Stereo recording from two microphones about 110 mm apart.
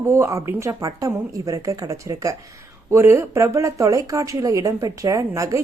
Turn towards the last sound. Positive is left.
turn(degrees=-30)  # may be behind; listen again after turning